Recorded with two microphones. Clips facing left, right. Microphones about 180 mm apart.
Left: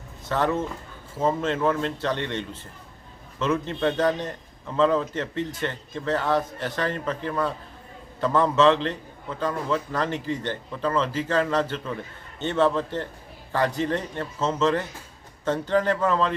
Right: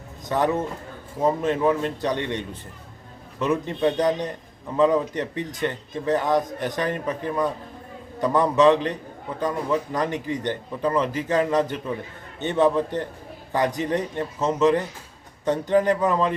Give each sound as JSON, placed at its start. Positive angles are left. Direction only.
{"t": 0.3, "sound": "a man's voice", "side_deg": -15}